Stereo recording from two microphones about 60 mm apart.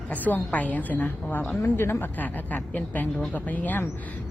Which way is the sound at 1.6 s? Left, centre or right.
Left.